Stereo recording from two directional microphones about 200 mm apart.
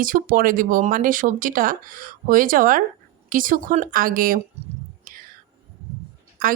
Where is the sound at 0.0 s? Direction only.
45° right (ahead or behind).